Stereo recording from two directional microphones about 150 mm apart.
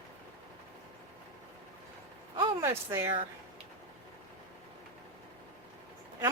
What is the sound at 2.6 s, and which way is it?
Speech, 20° right (ahead or behind).